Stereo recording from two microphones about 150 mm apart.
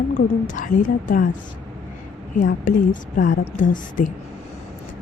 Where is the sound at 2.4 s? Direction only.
60° left (ahead or behind).